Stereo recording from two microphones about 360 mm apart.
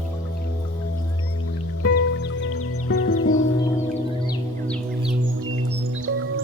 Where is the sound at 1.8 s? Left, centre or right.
Left.